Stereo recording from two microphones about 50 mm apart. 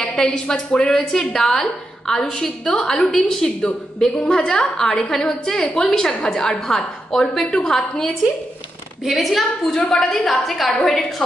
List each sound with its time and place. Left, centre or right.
0.0 s a sound: centre
0.5 s a woman's voice: centre
9.0 s a woman's voice: centre